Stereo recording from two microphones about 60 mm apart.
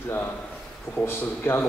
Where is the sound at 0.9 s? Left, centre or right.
Left.